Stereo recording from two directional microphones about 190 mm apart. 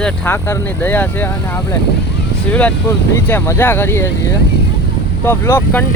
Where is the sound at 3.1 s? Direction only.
15° left (ahead or behind).